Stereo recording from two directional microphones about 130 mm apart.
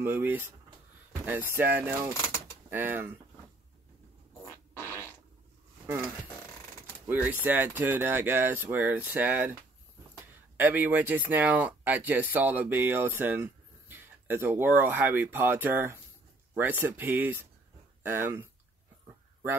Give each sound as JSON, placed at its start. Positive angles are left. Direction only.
{"t": 0.0, "sound": "speech", "side_deg": -15}
{"t": 4.7, "sound": "fart", "side_deg": 15}
{"t": 7.1, "sound": "speech", "side_deg": -15}
{"t": 10.6, "sound": "speech", "side_deg": -15}